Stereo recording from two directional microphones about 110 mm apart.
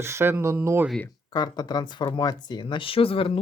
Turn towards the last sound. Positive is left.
turn(degrees=55)  # may be behind; listen again after turning